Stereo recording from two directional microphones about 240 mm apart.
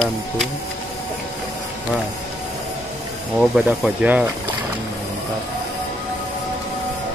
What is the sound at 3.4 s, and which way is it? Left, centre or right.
Speech, centre.